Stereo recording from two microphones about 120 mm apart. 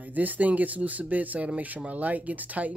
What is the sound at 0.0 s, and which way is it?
Speech, 15° right (ahead or behind).